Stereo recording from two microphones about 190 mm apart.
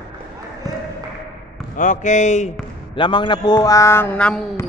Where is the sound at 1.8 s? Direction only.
40° left (ahead or behind).